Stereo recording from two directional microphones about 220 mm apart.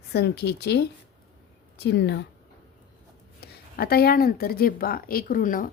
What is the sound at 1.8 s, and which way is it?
Speech, 50° left (ahead or behind).